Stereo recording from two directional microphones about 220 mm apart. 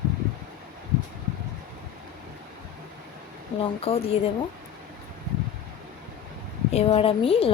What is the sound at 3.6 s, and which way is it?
Speech, 25° left (ahead or behind).